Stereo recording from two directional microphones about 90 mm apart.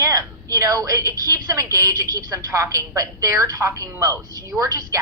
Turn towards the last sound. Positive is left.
turn(degrees=-35)  # may be behind; listen again after turning